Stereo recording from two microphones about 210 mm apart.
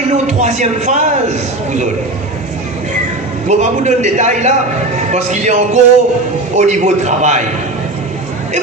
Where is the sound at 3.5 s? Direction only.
35° right (ahead or behind).